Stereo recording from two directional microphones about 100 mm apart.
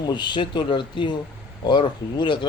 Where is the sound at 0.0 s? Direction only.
50° left (ahead or behind).